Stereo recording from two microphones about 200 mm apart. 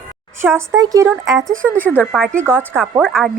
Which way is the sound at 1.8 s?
10° left (ahead or behind).